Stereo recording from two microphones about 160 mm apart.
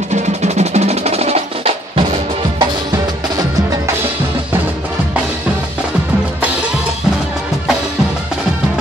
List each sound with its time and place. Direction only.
0.1 s percussion: 45° right (ahead or behind)